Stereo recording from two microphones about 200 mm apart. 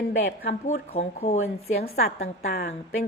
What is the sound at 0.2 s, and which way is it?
Speech, 50° left (ahead or behind).